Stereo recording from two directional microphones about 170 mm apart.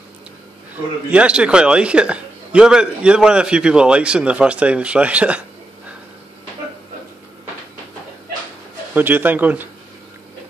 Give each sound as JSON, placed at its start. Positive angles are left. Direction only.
{"t": 1.1, "sound": "a man's voice", "side_deg": -5}
{"t": 8.9, "sound": "a man's voice", "side_deg": -10}